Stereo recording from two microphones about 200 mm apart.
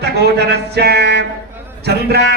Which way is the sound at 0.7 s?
55° right (ahead or behind).